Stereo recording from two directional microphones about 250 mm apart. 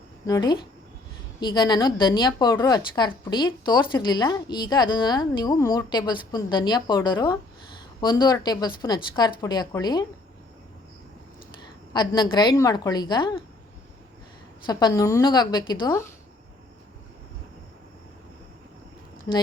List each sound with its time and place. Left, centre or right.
0.3 s a woman's voice: centre
11.9 s a woman's voice: centre
14.7 s a woman's voice: centre